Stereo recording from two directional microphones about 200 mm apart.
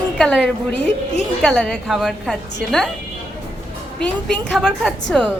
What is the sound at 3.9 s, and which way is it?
A woman's voice, centre (ahead or behind).